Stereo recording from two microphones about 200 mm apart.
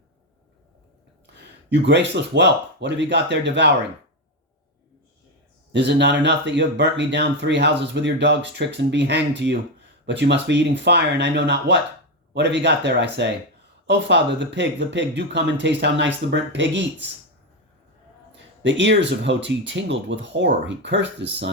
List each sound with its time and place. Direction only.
1.7 s speech: 60° right (ahead or behind)
5.7 s speech: 60° right (ahead or behind)
18.3 s speech: 65° right (ahead or behind)